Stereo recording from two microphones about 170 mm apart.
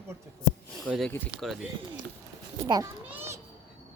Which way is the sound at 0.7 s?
Centre (ahead or behind).